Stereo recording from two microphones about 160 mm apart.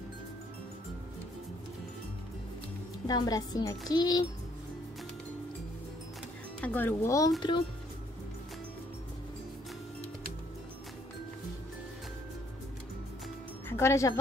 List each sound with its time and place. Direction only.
3.1 s a child's voice: 25° left (ahead or behind)
6.6 s a child's voice: 10° left (ahead or behind); by 7.6 s 30° left (ahead or behind)
13.7 s speech: 15° left (ahead or behind)